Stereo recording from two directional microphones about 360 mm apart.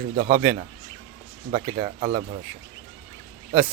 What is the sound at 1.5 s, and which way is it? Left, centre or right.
Speech, centre.